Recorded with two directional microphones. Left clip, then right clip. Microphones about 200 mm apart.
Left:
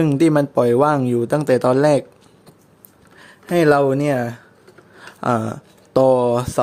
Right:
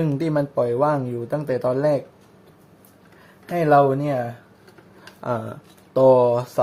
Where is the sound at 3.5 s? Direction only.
60° left (ahead or behind).